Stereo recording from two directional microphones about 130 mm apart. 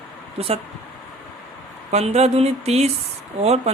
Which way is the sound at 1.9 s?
55° right (ahead or behind).